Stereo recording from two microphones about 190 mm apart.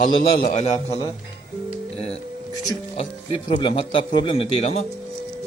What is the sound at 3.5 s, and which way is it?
A man's voice, 25° left (ahead or behind).